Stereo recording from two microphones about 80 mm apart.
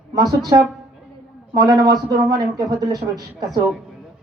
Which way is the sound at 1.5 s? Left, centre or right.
Right.